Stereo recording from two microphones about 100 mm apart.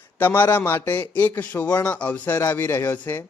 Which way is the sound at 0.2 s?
20° left (ahead or behind).